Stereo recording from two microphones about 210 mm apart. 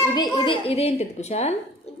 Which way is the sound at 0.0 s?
20° left (ahead or behind).